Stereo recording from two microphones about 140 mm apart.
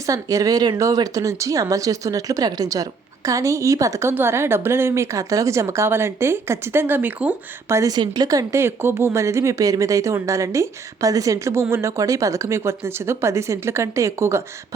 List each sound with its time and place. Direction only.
0.0 s speech: 25° right (ahead or behind)
7.7 s speech: 25° right (ahead or behind)